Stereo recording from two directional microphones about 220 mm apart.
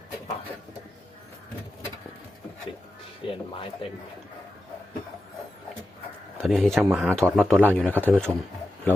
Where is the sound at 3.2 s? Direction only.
20° left (ahead or behind).